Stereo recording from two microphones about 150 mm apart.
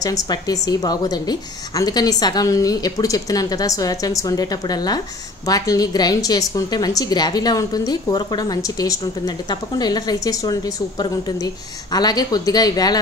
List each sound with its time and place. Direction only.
0.0 s a woman's voice: 25° left (ahead or behind)